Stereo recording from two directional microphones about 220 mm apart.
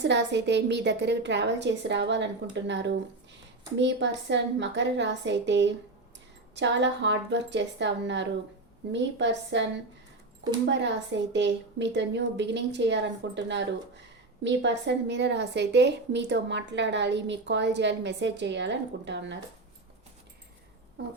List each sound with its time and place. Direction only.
0.0 s a woman's voice: 50° right (ahead or behind)
10.7 s a woman's voice: 55° right (ahead or behind)